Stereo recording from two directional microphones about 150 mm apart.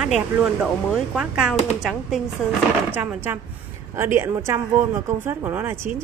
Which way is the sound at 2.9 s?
10° right (ahead or behind).